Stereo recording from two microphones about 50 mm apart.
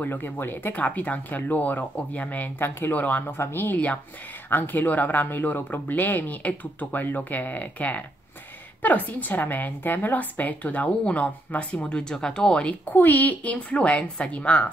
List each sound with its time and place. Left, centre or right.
0.0 s speech: left
3.3 s speech: left
3.7 s speech: left
12.0 s speech: centre
12.9 s speech: left